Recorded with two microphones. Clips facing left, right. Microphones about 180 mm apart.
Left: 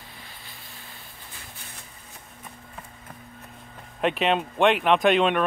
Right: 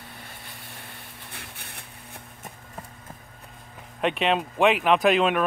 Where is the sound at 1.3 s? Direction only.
65° right (ahead or behind).